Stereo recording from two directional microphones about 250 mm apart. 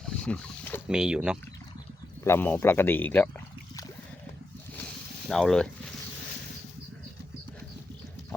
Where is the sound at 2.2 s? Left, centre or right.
Centre.